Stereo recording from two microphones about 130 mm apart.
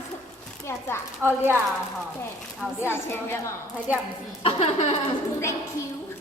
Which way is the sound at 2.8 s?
20° left (ahead or behind).